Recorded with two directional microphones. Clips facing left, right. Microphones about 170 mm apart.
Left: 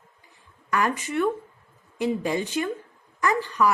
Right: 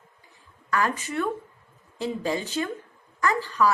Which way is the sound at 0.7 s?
15° left (ahead or behind).